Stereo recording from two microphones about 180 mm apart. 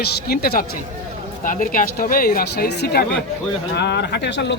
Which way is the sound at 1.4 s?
45° left (ahead or behind).